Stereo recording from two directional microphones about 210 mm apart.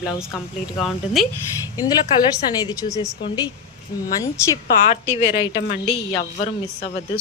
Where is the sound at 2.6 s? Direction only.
15° left (ahead or behind).